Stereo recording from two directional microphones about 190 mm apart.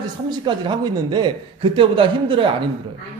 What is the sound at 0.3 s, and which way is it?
A man's voice, 25° right (ahead or behind).